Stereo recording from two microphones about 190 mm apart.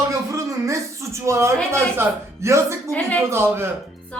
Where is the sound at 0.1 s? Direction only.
15° right (ahead or behind).